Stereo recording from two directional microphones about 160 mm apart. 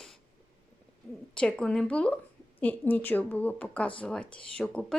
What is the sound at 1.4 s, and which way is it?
A woman's voice, 5° left (ahead or behind).